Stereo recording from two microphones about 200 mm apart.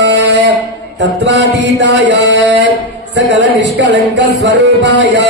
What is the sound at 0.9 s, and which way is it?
Music, 60° right (ahead or behind).